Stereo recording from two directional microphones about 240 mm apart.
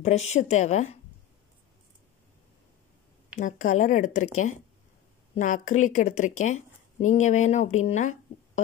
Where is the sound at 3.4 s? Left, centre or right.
Left.